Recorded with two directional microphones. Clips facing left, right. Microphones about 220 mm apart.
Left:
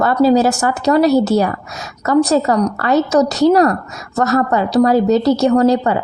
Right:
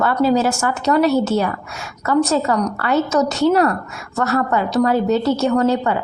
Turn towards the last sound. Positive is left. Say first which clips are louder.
# left 4 dB
turn(degrees=35)  # may be behind; listen again after turning